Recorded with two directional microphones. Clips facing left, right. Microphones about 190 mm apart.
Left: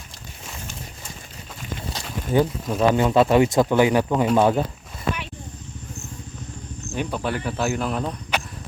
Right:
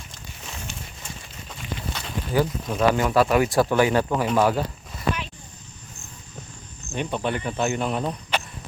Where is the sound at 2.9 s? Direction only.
25° left (ahead or behind).